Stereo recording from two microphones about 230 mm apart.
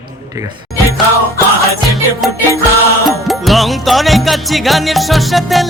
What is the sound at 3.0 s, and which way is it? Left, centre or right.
Music, centre.